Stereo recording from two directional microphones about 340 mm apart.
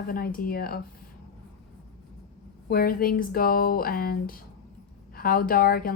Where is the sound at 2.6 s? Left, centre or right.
Left.